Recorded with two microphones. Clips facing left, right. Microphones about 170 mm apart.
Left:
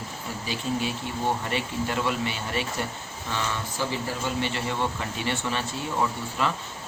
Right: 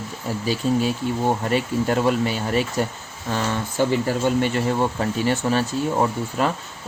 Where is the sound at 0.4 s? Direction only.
40° right (ahead or behind).